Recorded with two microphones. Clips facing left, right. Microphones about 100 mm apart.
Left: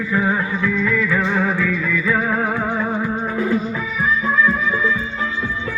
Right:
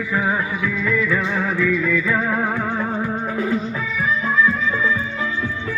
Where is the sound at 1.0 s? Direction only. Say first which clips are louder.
Left 2 dB; 35° left (ahead or behind).